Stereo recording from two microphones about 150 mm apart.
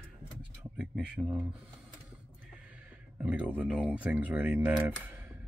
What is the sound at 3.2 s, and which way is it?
Speech, 10° right (ahead or behind).